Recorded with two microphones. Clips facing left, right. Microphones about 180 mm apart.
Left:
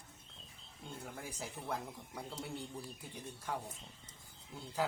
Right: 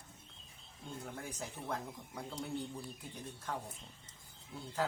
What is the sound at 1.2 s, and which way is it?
Speech, 10° left (ahead or behind).